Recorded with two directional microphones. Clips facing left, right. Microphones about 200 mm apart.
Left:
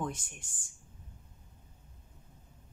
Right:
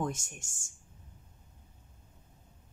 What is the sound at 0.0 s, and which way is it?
Speech, 45° right (ahead or behind).